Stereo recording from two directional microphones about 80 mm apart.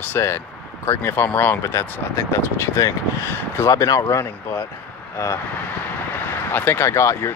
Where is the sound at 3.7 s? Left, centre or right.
Left.